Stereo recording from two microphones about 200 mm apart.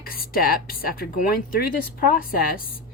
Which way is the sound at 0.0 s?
45° left (ahead or behind).